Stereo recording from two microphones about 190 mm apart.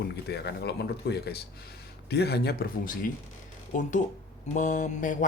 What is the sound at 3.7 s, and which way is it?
Mantra, 40° left (ahead or behind).